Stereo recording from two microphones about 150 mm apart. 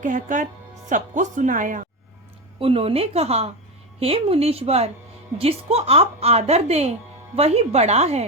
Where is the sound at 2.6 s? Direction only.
40° right (ahead or behind).